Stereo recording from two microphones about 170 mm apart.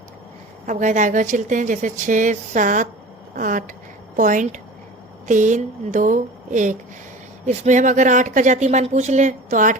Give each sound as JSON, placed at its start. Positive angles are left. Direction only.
{"t": 0.6, "sound": "speech", "side_deg": -45}